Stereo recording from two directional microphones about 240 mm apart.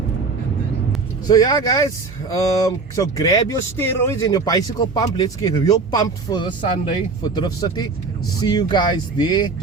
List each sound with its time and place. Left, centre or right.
1.3 s speech: centre